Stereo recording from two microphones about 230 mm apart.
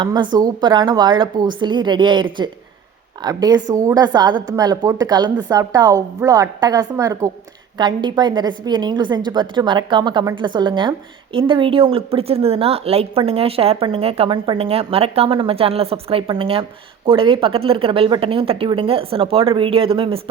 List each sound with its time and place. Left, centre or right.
0.0 s a woman's voice: centre